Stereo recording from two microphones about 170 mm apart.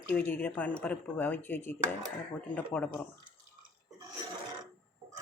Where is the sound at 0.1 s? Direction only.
10° left (ahead or behind).